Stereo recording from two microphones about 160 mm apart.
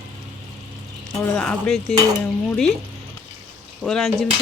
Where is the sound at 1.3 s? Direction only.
5° left (ahead or behind).